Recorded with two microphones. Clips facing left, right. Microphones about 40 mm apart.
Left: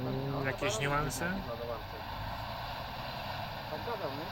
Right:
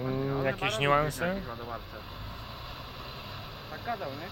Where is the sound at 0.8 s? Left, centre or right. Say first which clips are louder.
Right 10 dB; right.